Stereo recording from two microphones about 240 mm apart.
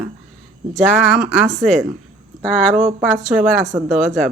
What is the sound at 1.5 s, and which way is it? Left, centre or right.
Speech, right.